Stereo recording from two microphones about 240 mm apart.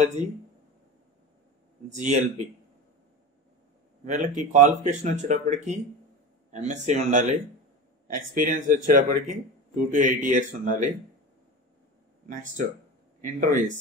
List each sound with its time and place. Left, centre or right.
0.0 s speech: right
1.9 s speech: right
4.0 s speech: right
13.2 s speech: right